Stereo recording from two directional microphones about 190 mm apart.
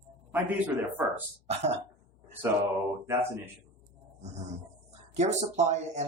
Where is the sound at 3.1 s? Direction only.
15° right (ahead or behind).